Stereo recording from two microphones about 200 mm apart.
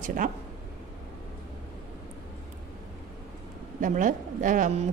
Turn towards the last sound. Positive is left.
turn(degrees=-40)  # may be behind; listen again after turning